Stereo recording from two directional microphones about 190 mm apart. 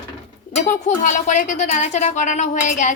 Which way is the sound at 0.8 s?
40° left (ahead or behind).